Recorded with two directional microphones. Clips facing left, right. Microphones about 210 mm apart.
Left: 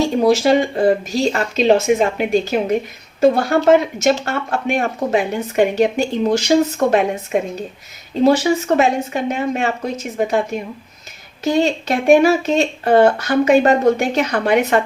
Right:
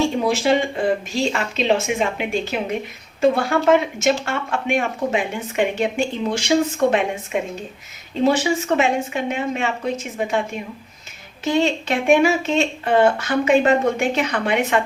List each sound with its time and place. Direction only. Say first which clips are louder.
0.2 s speech: left 5 dB; 40° left (ahead or behind)
11.4 s speech: left 3 dB; 40° left (ahead or behind)